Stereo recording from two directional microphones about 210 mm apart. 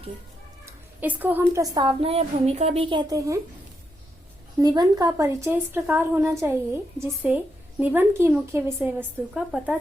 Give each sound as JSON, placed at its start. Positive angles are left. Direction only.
{"t": 0.6, "sound": "a woman's voice", "side_deg": -10}
{"t": 4.6, "sound": "a woman's voice", "side_deg": -20}